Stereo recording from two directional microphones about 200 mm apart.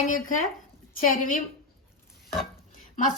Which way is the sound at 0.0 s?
40° left (ahead or behind).